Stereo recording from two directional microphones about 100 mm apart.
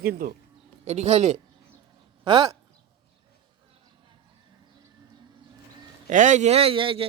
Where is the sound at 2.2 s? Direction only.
55° right (ahead or behind).